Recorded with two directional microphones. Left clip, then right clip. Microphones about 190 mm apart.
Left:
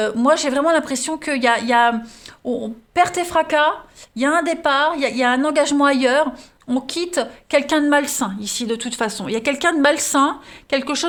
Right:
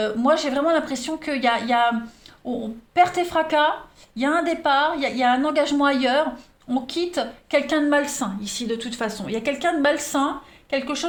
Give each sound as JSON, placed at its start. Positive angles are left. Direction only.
{"t": 0.0, "sound": "a woman's voice", "side_deg": 45}